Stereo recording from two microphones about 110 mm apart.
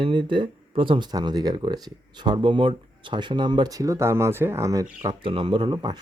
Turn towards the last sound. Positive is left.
turn(degrees=-45)  # may be behind; listen again after turning